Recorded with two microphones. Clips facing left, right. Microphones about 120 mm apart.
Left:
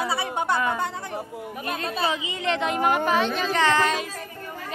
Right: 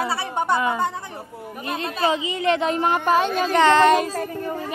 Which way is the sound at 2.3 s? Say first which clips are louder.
Right 4 dB; 35° right (ahead or behind).